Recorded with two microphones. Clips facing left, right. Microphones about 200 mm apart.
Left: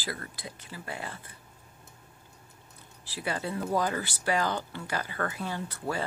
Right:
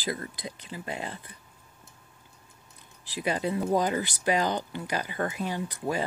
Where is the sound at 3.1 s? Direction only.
20° right (ahead or behind).